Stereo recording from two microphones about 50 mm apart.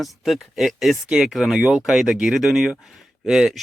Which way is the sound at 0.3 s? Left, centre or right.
Centre.